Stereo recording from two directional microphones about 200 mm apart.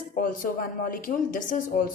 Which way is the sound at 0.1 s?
45° left (ahead or behind).